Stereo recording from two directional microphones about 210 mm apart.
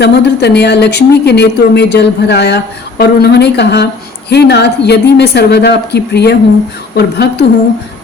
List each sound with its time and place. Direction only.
0.0 s speech: 50° left (ahead or behind)